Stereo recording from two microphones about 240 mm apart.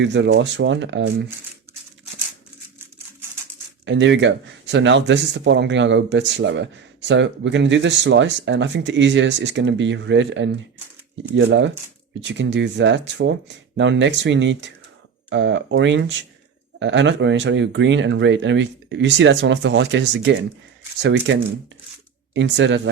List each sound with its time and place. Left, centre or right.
0.0 s speech: right
3.8 s speech: right
22.4 s speech: right